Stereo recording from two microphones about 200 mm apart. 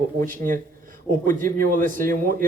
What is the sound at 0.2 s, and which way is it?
A man's voice, 40° right (ahead or behind).